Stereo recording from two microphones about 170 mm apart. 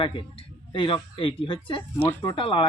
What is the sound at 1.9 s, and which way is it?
Speech, 15° left (ahead or behind).